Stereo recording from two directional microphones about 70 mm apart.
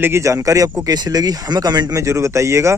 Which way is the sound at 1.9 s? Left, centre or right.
Right.